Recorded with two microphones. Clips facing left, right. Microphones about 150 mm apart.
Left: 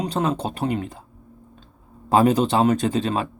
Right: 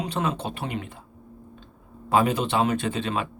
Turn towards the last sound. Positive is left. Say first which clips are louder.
# left 5 dB
turn(degrees=35)  # may be behind; listen again after turning